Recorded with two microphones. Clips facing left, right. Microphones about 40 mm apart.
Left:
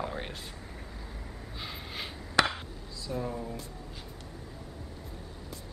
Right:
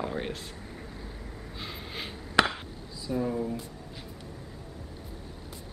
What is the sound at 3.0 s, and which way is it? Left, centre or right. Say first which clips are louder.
Speech: right 5 dB; centre.